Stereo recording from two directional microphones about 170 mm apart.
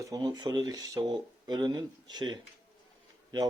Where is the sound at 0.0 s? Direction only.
20° right (ahead or behind).